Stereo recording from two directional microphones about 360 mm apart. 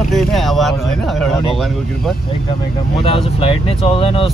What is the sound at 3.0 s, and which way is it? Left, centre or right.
Speech, centre.